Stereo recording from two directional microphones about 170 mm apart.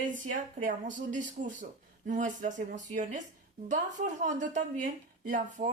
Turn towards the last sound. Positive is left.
turn(degrees=-50)  # may be behind; listen again after turning